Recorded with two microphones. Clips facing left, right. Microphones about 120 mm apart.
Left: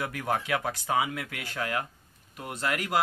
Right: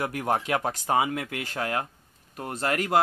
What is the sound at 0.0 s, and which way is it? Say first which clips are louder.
Speech: right 3 dB; 35° right (ahead or behind).